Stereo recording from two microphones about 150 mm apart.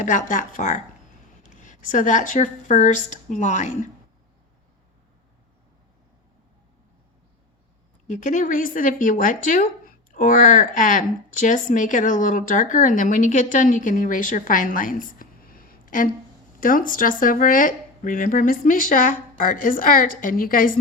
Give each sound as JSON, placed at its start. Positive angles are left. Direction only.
{"t": 0.0, "sound": "speech", "side_deg": 60}
{"t": 8.0, "sound": "speech", "side_deg": 55}